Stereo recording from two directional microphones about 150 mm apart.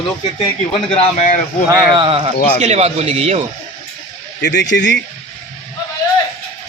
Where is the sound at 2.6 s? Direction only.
50° right (ahead or behind).